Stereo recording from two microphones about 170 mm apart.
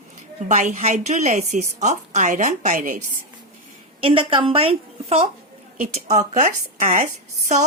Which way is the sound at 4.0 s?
35° right (ahead or behind).